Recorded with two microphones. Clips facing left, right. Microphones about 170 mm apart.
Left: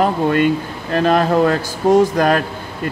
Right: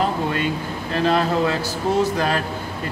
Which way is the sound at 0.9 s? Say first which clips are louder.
Left 5 dB; 50° left (ahead or behind).